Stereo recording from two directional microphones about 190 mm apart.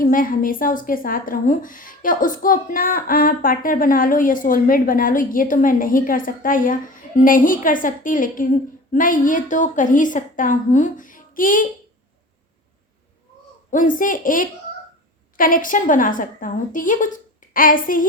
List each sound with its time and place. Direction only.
0.0 s a woman's voice: 45° left (ahead or behind)
13.7 s a woman's voice: 45° left (ahead or behind)